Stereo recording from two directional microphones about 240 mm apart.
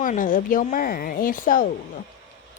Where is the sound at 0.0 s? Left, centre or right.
Left.